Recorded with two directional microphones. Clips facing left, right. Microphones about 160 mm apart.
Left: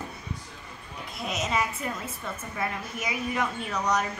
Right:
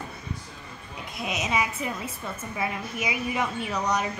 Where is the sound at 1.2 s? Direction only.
5° right (ahead or behind).